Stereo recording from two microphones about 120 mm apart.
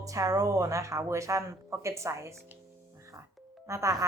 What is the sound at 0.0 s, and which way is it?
Speech, 25° right (ahead or behind).